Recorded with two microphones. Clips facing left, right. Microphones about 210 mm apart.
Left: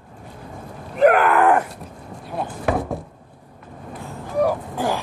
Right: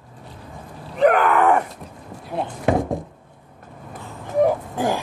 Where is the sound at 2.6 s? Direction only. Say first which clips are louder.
Right 3 dB; 20° right (ahead or behind).